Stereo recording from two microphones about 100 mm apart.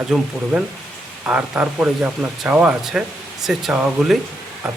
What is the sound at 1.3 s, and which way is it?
Speech, 15° right (ahead or behind).